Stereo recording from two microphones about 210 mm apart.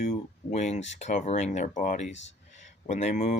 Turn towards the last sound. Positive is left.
turn(degrees=35)  # may be behind; listen again after turning